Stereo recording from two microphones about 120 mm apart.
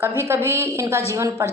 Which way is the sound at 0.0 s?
20° right (ahead or behind).